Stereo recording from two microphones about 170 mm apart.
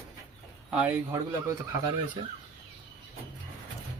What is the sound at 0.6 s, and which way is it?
Speech, 10° right (ahead or behind).